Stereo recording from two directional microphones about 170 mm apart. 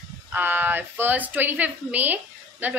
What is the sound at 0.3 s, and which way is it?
Speech, 10° right (ahead or behind).